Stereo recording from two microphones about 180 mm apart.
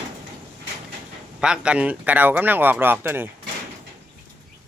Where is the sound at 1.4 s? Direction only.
5° right (ahead or behind).